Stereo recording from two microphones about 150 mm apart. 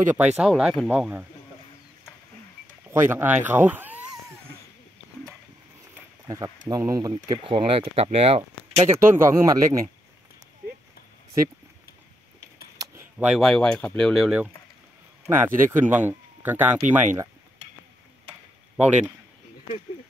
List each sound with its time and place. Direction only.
0.1 s speech: 10° right (ahead or behind)
2.9 s speech: 15° right (ahead or behind)
6.2 s speech: 25° right (ahead or behind)
7.4 s speech: 35° right (ahead or behind)
8.7 s speech: 15° right (ahead or behind)
12.8 s speech: 15° right (ahead or behind)
15.2 s speech: 15° right (ahead or behind)